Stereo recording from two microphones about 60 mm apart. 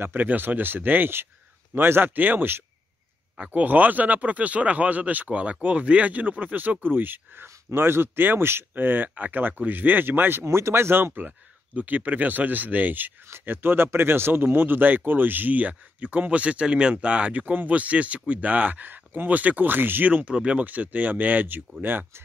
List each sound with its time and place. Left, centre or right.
0.0 s speech: right
10.4 s speech: right